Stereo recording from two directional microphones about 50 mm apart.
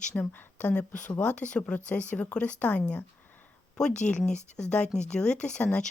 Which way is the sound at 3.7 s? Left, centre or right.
Centre.